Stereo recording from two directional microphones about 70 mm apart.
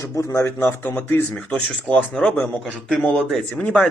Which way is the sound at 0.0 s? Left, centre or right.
Left.